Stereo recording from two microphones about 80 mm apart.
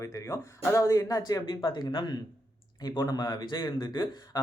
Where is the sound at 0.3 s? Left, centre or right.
Left.